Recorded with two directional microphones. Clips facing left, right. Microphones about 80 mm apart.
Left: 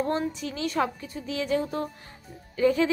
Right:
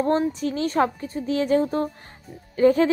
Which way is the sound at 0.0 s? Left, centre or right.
Right.